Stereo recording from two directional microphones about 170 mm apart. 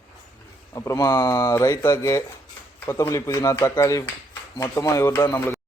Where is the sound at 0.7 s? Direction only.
20° left (ahead or behind).